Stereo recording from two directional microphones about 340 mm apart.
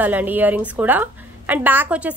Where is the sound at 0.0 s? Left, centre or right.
Centre.